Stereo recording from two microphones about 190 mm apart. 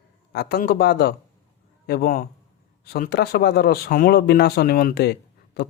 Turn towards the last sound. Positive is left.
turn(degrees=60)  # may be behind; listen again after turning